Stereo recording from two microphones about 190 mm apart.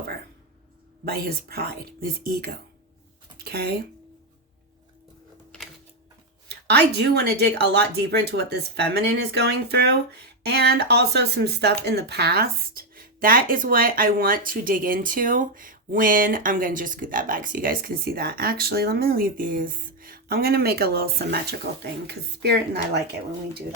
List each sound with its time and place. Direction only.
1.0 s speech: 55° right (ahead or behind)
6.5 s speech: 60° right (ahead or behind)